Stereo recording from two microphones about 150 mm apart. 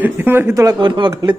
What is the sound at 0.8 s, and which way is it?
Speech, 30° right (ahead or behind).